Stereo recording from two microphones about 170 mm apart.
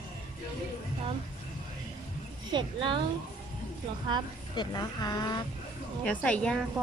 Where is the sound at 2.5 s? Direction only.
30° right (ahead or behind).